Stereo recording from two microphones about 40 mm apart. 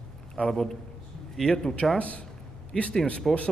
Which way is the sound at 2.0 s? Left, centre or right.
Left.